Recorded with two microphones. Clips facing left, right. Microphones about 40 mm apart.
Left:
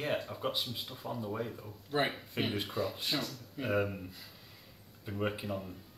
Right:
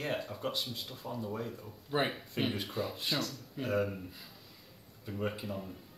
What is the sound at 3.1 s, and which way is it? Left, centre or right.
Speech, centre.